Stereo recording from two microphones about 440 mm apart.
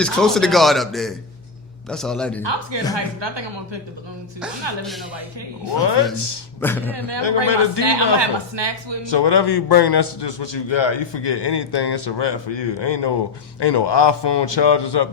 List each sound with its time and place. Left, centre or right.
0.0 s speech: centre
2.4 s speech: right
4.8 s speech: centre
5.8 s a man's voice: left
6.6 s speech: centre
7.4 s a man's voice: left
7.8 s speech: right
9.0 s a man's voice: left